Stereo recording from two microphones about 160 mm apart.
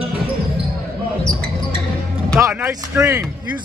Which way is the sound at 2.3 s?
15° right (ahead or behind).